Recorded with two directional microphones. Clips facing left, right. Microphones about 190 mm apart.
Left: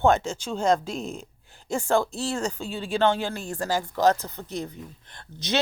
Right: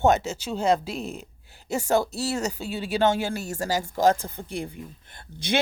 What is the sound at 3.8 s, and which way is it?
Speech, 50° right (ahead or behind).